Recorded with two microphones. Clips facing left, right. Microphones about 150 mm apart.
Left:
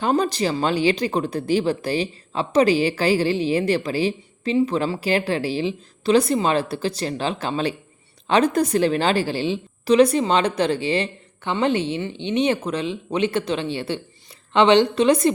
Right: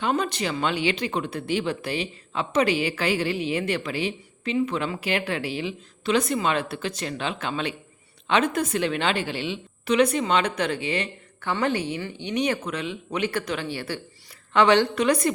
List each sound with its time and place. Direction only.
0.0 s speech: 35° left (ahead or behind)
11.3 s speech: 20° left (ahead or behind)